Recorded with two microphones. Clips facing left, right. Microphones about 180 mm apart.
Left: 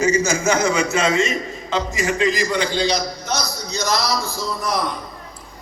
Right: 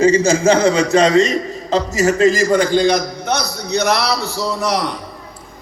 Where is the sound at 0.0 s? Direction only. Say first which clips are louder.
Right 6 dB; 30° right (ahead or behind); by 4.9 s 75° right (ahead or behind).